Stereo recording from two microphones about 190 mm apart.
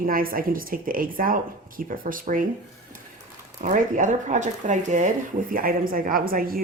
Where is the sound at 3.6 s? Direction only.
40° right (ahead or behind).